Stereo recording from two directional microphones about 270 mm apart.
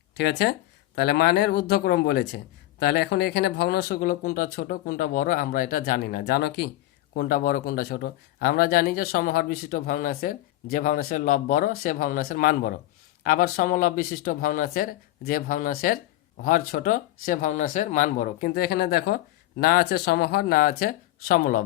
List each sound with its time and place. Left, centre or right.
0.2 s a man's voice: left